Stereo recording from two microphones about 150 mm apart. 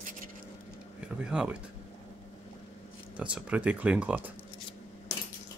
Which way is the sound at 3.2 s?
10° right (ahead or behind).